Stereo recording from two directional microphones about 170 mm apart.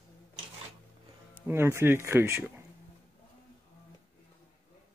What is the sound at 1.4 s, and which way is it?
Speech, 15° right (ahead or behind).